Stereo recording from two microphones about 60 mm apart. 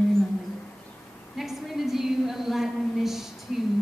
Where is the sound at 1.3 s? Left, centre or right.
Centre.